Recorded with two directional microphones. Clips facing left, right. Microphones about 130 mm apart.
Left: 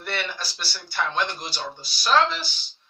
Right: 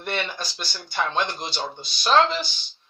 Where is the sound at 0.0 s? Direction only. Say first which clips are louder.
Right 2 dB; 20° right (ahead or behind).